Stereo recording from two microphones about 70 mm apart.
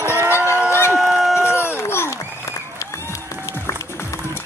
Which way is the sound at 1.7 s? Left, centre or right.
Left.